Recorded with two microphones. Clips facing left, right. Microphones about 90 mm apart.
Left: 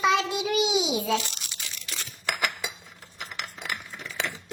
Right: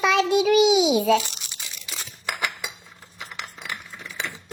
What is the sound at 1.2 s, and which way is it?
Crumpling, 20° right (ahead or behind).